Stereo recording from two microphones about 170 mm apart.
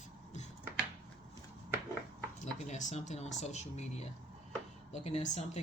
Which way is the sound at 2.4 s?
45° left (ahead or behind).